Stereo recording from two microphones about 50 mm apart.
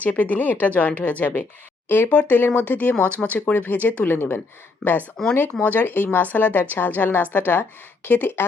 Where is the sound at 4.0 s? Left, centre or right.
Left.